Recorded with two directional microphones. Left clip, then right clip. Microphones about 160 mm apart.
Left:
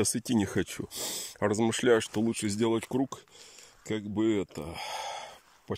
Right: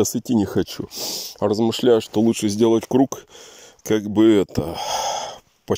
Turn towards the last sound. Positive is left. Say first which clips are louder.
# right 14 dB
turn(degrees=-45)  # may be behind; listen again after turning